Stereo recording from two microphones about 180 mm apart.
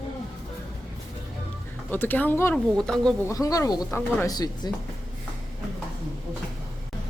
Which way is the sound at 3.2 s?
20° left (ahead or behind).